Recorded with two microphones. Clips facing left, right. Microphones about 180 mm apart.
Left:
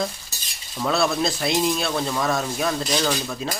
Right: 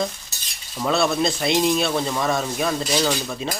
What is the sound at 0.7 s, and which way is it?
Speech, centre (ahead or behind).